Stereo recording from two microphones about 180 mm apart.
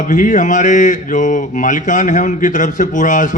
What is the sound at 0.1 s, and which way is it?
Mantra, 45° left (ahead or behind).